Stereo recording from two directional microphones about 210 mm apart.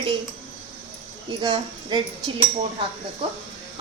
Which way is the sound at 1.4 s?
20° right (ahead or behind).